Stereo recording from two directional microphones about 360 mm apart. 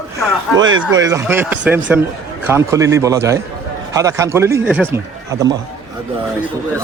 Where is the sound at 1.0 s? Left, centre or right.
Centre.